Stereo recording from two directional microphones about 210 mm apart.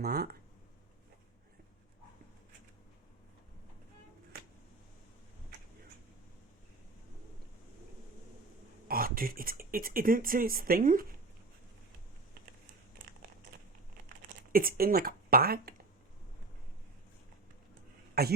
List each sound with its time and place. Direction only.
0.0 s speech: 50° right (ahead or behind)
8.9 s speech: 45° right (ahead or behind)
14.5 s speech: 45° right (ahead or behind)
18.1 s a man's voice: 50° right (ahead or behind)